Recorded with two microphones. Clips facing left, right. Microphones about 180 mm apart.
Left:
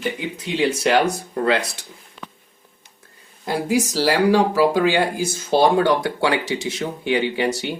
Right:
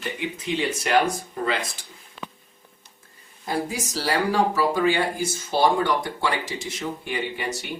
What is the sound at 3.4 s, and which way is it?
Speech, 90° left.